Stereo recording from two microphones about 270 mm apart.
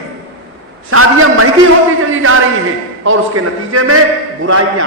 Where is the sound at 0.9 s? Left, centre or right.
Right.